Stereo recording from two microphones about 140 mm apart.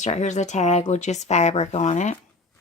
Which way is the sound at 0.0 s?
55° left (ahead or behind).